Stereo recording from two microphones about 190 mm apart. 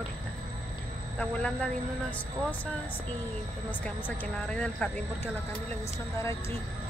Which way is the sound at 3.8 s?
5° left (ahead or behind).